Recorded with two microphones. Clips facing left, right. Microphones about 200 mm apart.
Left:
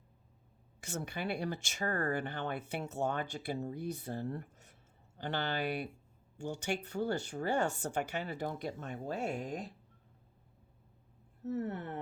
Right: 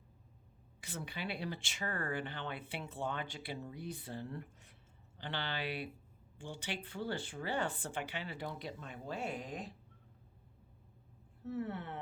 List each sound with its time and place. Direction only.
0.8 s speech: 45° left (ahead or behind)
11.4 s speech: 40° left (ahead or behind)